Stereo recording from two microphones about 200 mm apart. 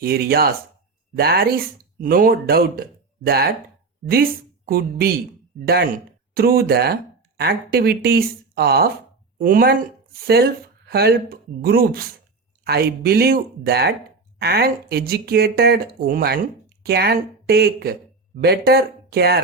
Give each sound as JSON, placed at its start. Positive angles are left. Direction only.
{"t": 0.0, "sound": "a woman's voice", "side_deg": -50}